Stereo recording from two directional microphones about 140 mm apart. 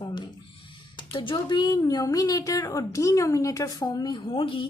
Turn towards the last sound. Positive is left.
turn(degrees=35)  # may be behind; listen again after turning